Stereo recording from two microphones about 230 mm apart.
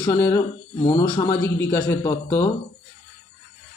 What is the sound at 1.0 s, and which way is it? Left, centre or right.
A man's voice, centre.